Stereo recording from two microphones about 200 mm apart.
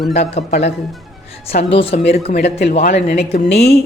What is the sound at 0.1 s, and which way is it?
Speech, 30° left (ahead or behind).